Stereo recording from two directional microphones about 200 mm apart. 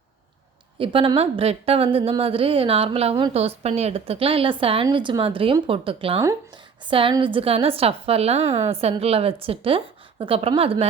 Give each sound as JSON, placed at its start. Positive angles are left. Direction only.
{"t": 0.8, "sound": "a woman's voice", "side_deg": -25}